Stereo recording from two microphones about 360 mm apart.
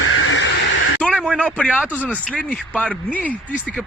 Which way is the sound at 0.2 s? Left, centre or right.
Left.